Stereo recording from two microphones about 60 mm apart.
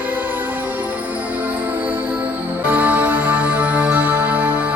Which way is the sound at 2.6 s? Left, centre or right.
Right.